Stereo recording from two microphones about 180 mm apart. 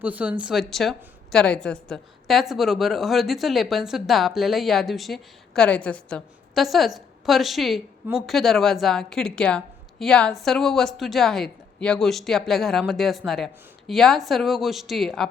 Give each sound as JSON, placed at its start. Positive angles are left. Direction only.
{"t": 0.0, "sound": "a woman's voice", "side_deg": -10}